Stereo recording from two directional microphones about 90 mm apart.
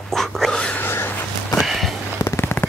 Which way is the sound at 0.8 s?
25° left (ahead or behind).